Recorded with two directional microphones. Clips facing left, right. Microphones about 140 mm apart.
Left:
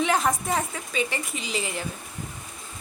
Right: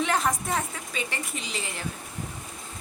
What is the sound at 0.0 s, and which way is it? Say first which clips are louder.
A woman's voice: left 2 dB; centre (ahead or behind).